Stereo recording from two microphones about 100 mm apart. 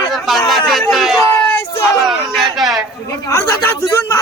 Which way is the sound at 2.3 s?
Centre (ahead or behind).